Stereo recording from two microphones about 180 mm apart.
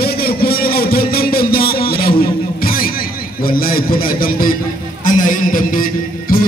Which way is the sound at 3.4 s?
55° left (ahead or behind).